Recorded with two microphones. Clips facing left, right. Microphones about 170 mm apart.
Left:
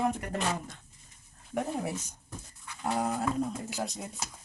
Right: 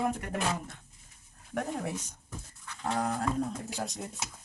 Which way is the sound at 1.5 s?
5° left (ahead or behind).